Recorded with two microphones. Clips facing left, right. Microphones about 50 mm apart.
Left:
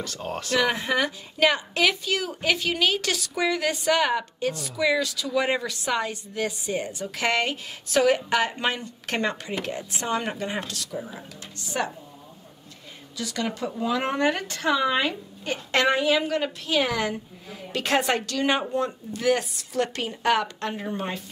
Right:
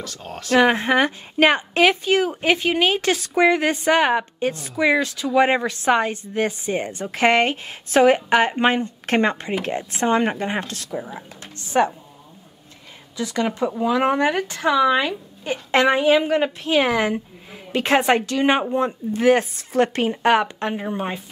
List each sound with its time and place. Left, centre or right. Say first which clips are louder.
0.0 s speech: left 2 dB; centre
0.6 s a woman's voice: right 7 dB; right
13.2 s speech: right 7 dB; right